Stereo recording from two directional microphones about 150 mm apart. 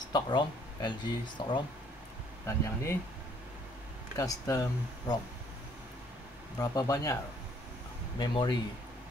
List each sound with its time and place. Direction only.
0.1 s speech: 30° left (ahead or behind)
2.4 s speech: 20° left (ahead or behind)
4.2 s speech: 20° left (ahead or behind)
6.6 s speech: 25° left (ahead or behind)
8.2 s speech: 30° left (ahead or behind)